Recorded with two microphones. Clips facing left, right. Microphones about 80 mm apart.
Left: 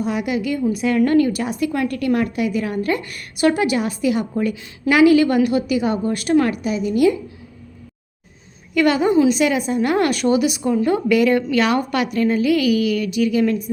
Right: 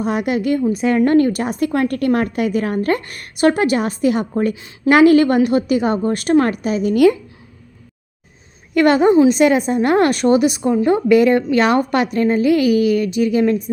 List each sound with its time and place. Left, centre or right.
0.0 s a woman's voice: right
0.6 s a woman's voice: right
6.9 s a woman's voice: right
8.7 s a woman's voice: right